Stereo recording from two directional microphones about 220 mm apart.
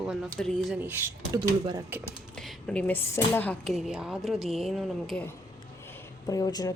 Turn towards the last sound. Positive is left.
turn(degrees=15)  # may be behind; listen again after turning